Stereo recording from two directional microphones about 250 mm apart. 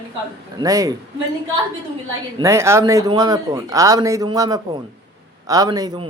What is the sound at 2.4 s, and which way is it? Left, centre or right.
Speech, centre.